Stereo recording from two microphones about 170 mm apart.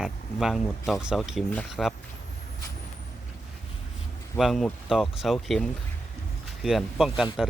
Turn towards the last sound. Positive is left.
turn(degrees=0)  # may be behind; listen again after turning